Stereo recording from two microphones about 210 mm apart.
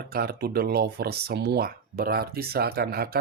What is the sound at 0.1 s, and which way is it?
Speech, 45° right (ahead or behind).